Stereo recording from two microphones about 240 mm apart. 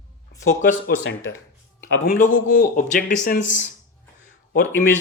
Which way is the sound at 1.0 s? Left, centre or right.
Left.